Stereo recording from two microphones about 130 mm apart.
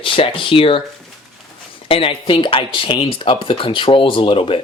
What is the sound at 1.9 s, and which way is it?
Speech, 45° left (ahead or behind).